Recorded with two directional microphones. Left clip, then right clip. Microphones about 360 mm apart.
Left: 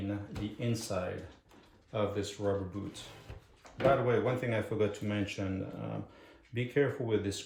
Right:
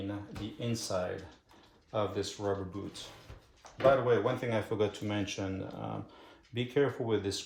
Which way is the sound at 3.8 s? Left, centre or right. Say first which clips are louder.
Right 2 dB; centre.